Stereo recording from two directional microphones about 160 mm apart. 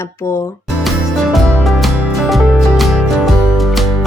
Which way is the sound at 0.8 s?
Centre (ahead or behind).